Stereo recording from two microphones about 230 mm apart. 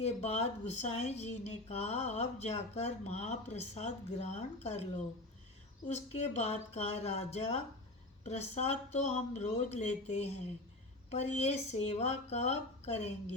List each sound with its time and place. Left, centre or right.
0.0 s speech: left